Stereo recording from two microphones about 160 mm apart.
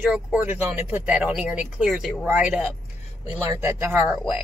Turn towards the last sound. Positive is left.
turn(degrees=-10)  # may be behind; listen again after turning